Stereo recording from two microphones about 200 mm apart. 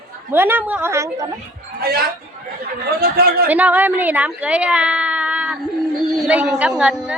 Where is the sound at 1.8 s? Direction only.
50° right (ahead or behind).